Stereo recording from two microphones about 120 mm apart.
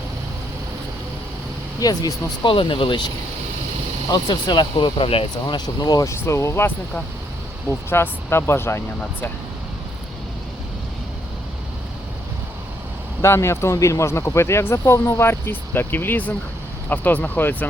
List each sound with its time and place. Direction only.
1.8 s speech: 30° left (ahead or behind)
4.1 s speech: 35° left (ahead or behind)
5.5 s speech: 35° left (ahead or behind)
13.2 s speech: 25° left (ahead or behind)